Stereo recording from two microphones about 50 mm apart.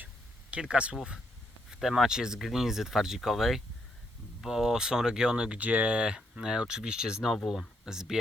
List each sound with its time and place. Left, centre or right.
0.6 s speech: centre
1.8 s speech: centre
5.5 s speech: right; by 7.3 s centre
7.3 s speech: centre
7.9 s speech: centre